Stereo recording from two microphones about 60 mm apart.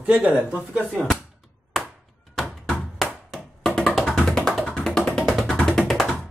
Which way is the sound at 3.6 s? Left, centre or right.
Centre.